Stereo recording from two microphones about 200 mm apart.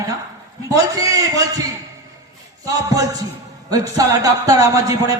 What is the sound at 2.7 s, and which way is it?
A man's voice, 15° right (ahead or behind).